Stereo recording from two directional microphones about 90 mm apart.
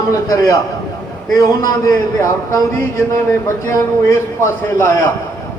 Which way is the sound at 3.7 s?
30° left (ahead or behind).